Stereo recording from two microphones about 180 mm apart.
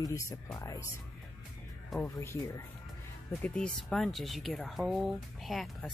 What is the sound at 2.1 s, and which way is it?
Speech, 20° left (ahead or behind).